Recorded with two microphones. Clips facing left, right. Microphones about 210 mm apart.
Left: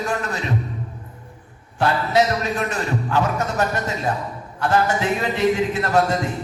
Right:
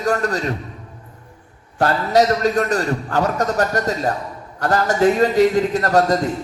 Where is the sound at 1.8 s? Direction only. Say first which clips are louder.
Right 3 dB; 40° right (ahead or behind).